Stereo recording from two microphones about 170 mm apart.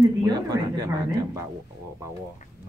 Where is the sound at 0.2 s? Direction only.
20° right (ahead or behind).